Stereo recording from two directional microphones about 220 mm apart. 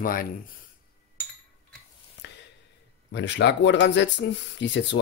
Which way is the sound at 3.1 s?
55° left (ahead or behind).